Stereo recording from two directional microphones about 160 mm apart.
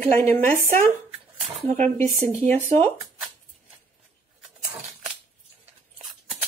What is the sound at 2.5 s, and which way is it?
Speech, 45° right (ahead or behind).